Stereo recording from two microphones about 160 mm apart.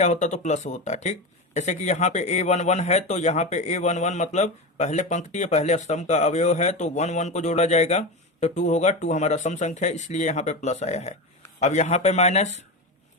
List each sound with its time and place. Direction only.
0.0 s speech: 50° left (ahead or behind)